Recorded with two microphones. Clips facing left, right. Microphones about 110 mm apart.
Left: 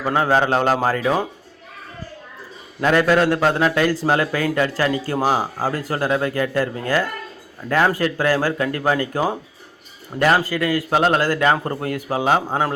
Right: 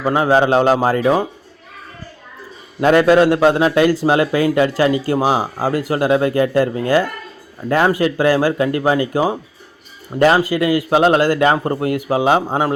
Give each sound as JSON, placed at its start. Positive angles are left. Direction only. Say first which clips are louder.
{"t": 0.0, "sound": "a man's voice", "louder": "right 4 dB", "side_deg": -10}
{"t": 2.8, "sound": "a man's voice", "louder": "right 5 dB", "side_deg": -20}
{"t": 10.2, "sound": "a man's voice", "louder": "right 4 dB", "side_deg": -25}